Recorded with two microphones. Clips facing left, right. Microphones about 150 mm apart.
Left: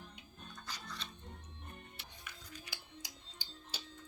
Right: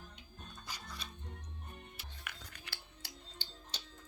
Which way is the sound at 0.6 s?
10° right (ahead or behind).